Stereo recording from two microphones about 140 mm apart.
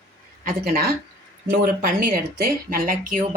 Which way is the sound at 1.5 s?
90° right.